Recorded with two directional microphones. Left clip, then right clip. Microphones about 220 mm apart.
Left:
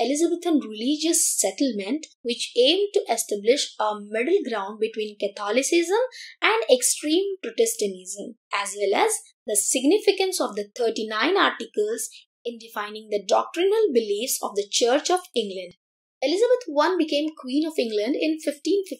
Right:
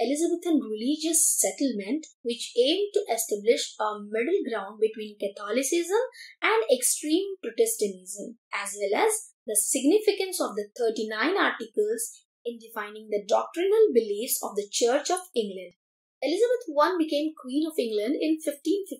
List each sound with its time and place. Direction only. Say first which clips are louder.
0.0 s a woman's voice: left 3 dB; 35° left (ahead or behind)